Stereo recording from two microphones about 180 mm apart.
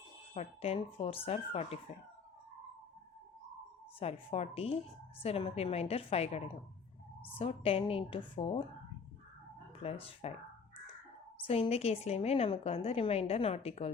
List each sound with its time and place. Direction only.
0.3 s a woman's voice: 35° left (ahead or behind)
4.0 s a woman's voice: 35° left (ahead or behind)
9.8 s a woman's voice: 30° left (ahead or behind)
11.4 s a woman's voice: 30° left (ahead or behind)